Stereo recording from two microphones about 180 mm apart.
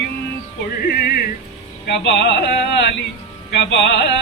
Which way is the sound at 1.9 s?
85° left.